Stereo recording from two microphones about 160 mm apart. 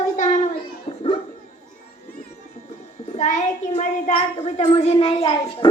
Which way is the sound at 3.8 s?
40° left (ahead or behind).